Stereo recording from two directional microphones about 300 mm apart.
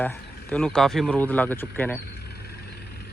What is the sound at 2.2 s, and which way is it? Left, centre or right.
Vehicle, left.